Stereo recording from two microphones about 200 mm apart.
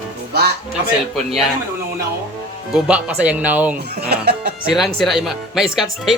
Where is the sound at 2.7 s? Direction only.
5° right (ahead or behind).